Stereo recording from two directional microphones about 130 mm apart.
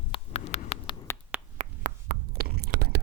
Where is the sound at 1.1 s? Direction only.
20° left (ahead or behind).